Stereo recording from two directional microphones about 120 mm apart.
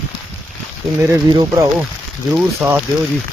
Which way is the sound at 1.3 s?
35° right (ahead or behind).